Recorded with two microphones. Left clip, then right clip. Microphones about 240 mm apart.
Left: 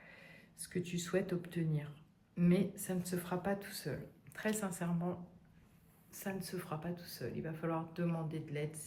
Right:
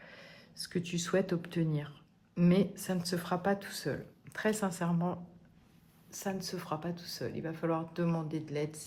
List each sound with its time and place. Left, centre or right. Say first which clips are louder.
0.0 s speech: right 5 dB; centre